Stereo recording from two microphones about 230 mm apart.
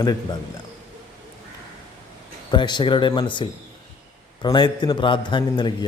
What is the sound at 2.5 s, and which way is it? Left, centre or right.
A man's voice, centre.